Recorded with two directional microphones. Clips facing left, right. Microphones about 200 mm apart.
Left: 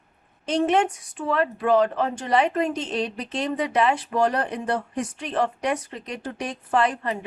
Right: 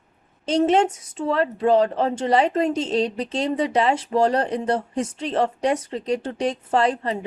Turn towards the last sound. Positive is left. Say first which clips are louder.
# right 2 dB
turn(degrees=-25)  # may be behind; listen again after turning